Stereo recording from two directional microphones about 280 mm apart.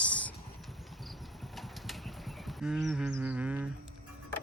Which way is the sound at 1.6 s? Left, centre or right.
Centre.